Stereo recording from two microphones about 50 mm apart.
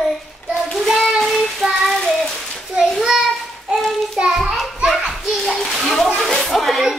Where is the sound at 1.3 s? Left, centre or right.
Centre.